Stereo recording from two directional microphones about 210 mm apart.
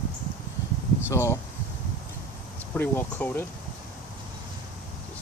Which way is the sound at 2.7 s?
10° left (ahead or behind).